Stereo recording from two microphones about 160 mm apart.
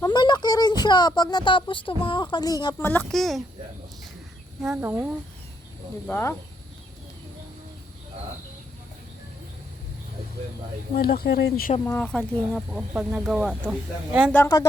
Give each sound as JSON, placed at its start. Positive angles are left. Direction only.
{"t": 0.0, "sound": "speech", "side_deg": 30}
{"t": 2.7, "sound": "speech", "side_deg": 10}
{"t": 4.8, "sound": "speech", "side_deg": -15}
{"t": 6.1, "sound": "speech", "side_deg": 15}
{"t": 10.9, "sound": "speech", "side_deg": 75}
{"t": 11.9, "sound": "speech", "side_deg": 5}
{"t": 12.9, "sound": "speech", "side_deg": -10}
{"t": 14.3, "sound": "speech", "side_deg": 20}